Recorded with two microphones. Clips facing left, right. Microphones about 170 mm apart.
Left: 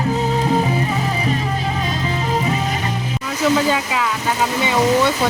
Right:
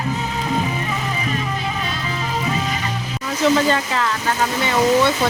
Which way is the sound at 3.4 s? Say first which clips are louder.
Even; 5° left (ahead or behind).